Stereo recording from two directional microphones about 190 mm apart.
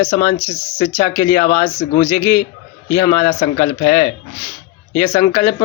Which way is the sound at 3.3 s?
30° left (ahead or behind).